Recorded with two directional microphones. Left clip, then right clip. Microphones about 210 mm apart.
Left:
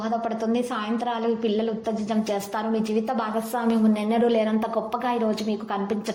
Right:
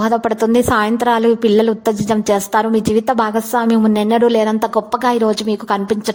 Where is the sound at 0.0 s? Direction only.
45° right (ahead or behind).